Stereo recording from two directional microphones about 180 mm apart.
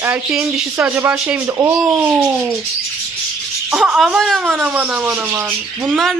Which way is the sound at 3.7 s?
5° right (ahead or behind).